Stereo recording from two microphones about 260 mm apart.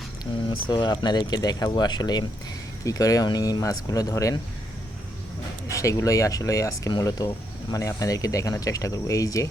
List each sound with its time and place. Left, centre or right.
0.7 s speech: centre
5.6 s speech: centre